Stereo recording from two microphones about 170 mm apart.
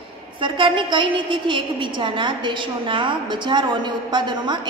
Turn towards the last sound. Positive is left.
turn(degrees=-25)  # may be behind; listen again after turning